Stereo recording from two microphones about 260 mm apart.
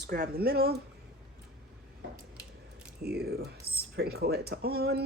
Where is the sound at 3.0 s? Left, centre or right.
Right.